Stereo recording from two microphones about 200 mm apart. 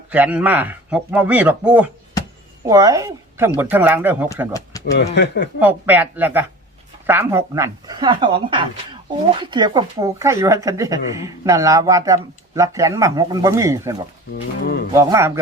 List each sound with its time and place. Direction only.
0.1 s speech: 10° right (ahead or behind)
4.9 s speech: 60° left (ahead or behind)
5.5 s speech: 10° right (ahead or behind)
14.6 s speech: 50° left (ahead or behind)
14.9 s speech: 15° right (ahead or behind)